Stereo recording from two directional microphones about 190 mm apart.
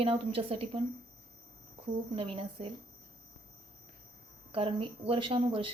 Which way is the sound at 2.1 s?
30° right (ahead or behind).